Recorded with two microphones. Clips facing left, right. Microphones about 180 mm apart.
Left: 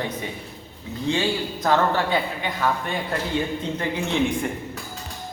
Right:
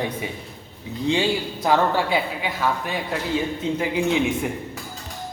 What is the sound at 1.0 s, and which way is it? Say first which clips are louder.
A man's voice: right 2 dB; 15° right (ahead or behind).